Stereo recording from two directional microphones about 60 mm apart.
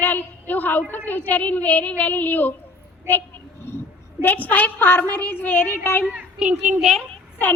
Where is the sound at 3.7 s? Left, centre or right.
Left.